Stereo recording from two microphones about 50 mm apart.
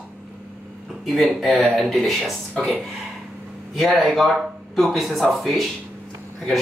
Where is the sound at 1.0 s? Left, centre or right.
Centre.